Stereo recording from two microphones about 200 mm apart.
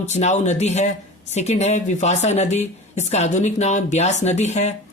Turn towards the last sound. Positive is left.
turn(degrees=35)  # may be behind; listen again after turning